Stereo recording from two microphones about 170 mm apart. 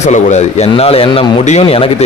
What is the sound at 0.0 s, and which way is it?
A man's voice, 45° left (ahead or behind).